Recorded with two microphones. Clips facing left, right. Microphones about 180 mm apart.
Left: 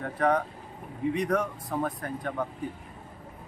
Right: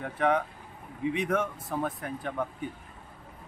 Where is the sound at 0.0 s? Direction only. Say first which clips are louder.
Left 1 dB; centre (ahead or behind).